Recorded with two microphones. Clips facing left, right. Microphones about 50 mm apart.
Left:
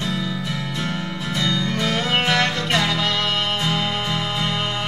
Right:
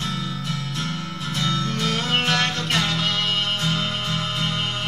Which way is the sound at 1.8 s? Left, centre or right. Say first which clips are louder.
Left 2 dB; left.